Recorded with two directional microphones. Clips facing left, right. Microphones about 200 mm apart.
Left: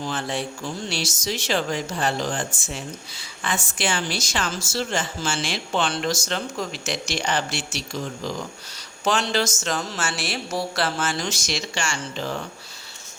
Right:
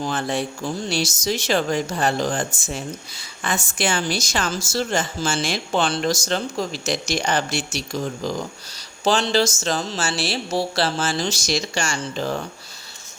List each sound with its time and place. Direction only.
0.0 s a woman's voice: 45° right (ahead or behind)
9.0 s a woman's voice: 30° right (ahead or behind)